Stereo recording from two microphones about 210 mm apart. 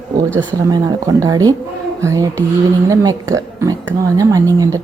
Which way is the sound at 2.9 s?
20° right (ahead or behind).